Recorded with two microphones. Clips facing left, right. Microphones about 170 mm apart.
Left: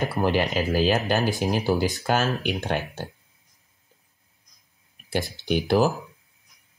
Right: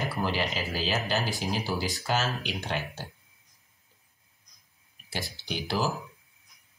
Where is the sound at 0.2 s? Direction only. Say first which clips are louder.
Left 8 dB; 55° left (ahead or behind).